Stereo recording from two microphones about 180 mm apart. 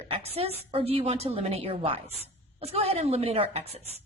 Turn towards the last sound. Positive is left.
turn(degrees=-35)  # may be behind; listen again after turning